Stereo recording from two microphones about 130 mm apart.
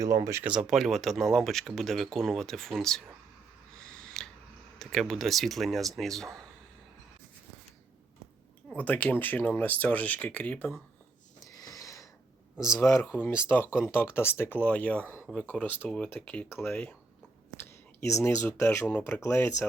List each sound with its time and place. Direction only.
0.0 s speech: 25° right (ahead or behind)
0.4 s speech: 10° right (ahead or behind)
3.9 s scissors: 5° left (ahead or behind)
4.8 s speech: 5° left (ahead or behind)
8.7 s speech: 10° left (ahead or behind)
11.4 s sniff: 30° left (ahead or behind)
12.5 s speech: 5° right (ahead or behind)
12.8 s speech: 20° left (ahead or behind)
15.3 s speech: 5° left (ahead or behind)
18.3 s speech: 20° left (ahead or behind)